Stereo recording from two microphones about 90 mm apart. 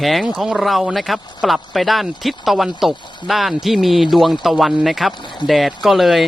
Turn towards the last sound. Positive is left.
turn(degrees=0)  # may be behind; listen again after turning